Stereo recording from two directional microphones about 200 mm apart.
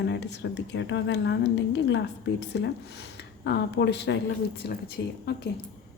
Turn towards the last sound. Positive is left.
turn(degrees=55)  # may be behind; listen again after turning